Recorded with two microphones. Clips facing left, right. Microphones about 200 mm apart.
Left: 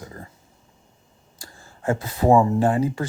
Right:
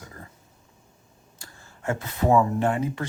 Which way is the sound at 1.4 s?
35° left (ahead or behind).